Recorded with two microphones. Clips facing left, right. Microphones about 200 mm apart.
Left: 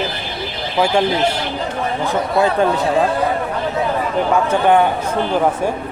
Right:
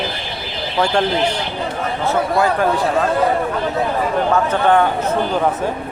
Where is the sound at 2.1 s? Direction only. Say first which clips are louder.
Right 1 dB; 20° left (ahead or behind).